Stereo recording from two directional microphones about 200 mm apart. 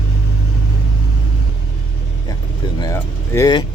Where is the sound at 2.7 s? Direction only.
15° left (ahead or behind).